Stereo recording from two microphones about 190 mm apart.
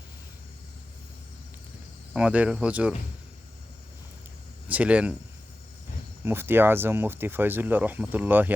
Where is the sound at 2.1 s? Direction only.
5° right (ahead or behind).